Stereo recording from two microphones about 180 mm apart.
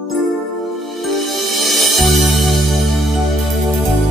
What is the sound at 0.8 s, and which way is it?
Music, centre (ahead or behind).